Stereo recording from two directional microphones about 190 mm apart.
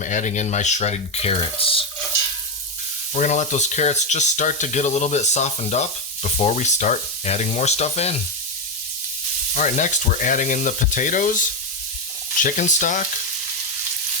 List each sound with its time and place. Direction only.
0.0 s speech: 40° left (ahead or behind)
3.2 s speech: 40° left (ahead or behind)
9.6 s speech: 40° left (ahead or behind)